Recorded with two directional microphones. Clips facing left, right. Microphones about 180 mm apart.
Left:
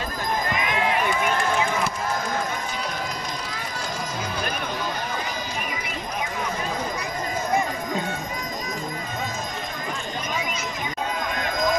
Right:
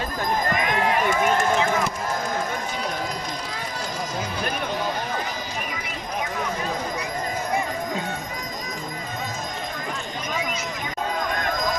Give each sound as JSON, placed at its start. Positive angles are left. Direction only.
{"t": 0.5, "sound": "run", "side_deg": -45}